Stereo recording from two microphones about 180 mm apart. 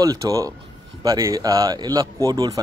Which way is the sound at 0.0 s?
20° right (ahead or behind).